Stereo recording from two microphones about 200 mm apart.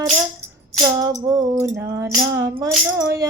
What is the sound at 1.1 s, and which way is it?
Music, 20° right (ahead or behind).